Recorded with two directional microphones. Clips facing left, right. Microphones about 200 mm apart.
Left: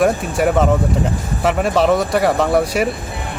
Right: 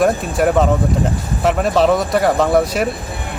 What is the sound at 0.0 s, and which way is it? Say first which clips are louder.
Speech: right 1 dB; 5° left (ahead or behind).